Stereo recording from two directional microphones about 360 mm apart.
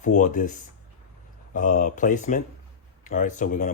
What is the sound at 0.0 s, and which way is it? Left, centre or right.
Speech, left.